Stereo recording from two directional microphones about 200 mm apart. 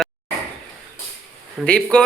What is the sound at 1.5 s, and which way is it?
Speech, 5° left (ahead or behind).